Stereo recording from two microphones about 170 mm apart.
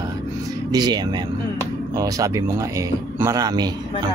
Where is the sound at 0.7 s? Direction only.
25° right (ahead or behind).